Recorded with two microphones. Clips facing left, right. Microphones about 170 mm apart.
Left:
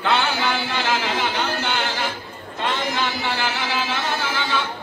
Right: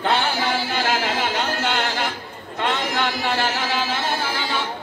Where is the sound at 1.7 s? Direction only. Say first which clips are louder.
Right 1 dB; 60° right (ahead or behind).